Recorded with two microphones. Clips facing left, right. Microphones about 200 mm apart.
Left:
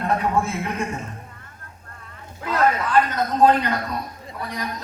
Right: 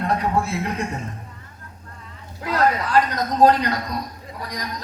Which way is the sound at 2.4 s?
35° right (ahead or behind).